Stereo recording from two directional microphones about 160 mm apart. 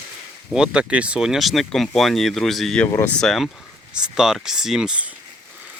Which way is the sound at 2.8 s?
15° left (ahead or behind).